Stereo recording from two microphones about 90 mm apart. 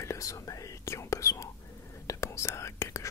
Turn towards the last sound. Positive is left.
turn(degrees=35)  # may be behind; listen again after turning